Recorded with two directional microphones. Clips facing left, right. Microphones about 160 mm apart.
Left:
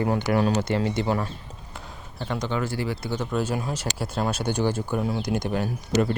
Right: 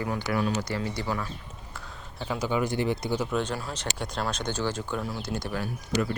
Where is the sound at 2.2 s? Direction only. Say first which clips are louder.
Even; 10° right (ahead or behind).